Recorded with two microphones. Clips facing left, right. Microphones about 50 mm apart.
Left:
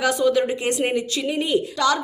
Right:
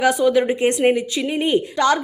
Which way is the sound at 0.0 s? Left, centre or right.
Right.